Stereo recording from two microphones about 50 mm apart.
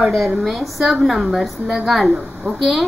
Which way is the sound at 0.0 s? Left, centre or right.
Centre.